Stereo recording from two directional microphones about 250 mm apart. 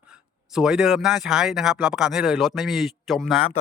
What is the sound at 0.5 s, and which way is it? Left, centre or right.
A man's voice, centre.